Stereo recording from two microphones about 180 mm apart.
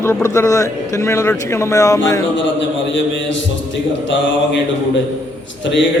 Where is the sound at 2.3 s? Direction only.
90° left.